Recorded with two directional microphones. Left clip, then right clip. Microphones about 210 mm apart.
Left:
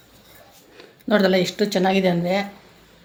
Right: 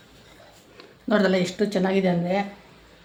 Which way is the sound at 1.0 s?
30° left (ahead or behind).